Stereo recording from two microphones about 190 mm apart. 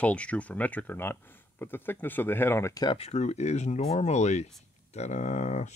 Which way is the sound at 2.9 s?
35° left (ahead or behind).